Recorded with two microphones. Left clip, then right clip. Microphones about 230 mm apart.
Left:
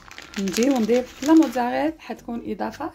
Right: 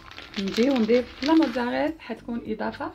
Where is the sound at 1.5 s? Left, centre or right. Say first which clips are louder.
Left 3 dB; left.